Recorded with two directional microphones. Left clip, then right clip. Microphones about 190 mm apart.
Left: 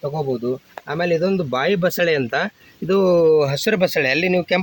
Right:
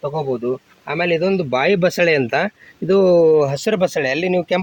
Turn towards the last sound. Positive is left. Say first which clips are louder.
# even
turn(degrees=-25)  # may be behind; listen again after turning